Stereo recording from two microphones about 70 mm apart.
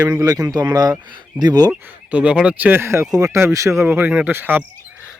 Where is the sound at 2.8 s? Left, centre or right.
Right.